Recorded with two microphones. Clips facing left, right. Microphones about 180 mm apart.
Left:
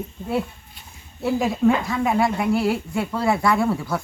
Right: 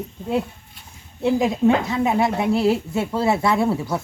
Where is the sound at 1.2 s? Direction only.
20° right (ahead or behind).